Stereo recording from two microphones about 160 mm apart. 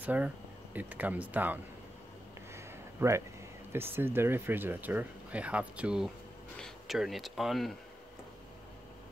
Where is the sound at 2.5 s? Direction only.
15° right (ahead or behind).